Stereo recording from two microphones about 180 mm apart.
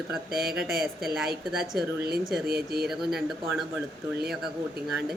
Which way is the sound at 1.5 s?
Centre (ahead or behind).